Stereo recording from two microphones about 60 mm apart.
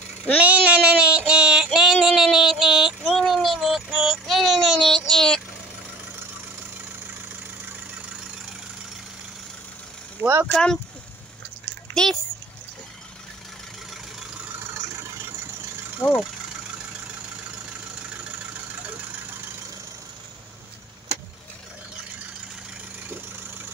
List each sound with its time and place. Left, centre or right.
0.4 s child singing: right
3.1 s child singing: centre
4.9 s child singing: centre
10.4 s speech: centre
11.9 s a sound: centre
16.0 s speech: left